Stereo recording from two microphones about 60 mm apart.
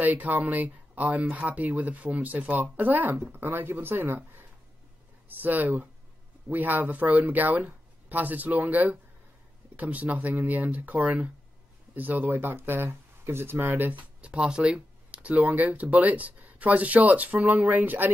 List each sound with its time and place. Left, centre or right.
0.0 s speech: right
14.2 s speech: centre